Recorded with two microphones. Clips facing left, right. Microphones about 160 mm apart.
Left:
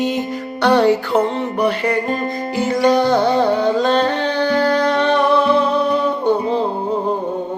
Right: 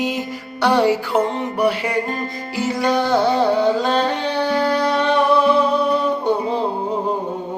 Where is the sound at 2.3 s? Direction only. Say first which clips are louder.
Left 4 dB; 55° left (ahead or behind).